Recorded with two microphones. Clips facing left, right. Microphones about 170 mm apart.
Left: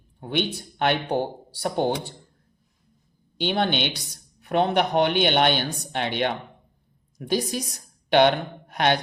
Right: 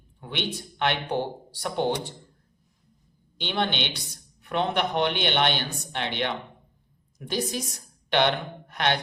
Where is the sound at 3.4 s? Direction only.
45° left (ahead or behind).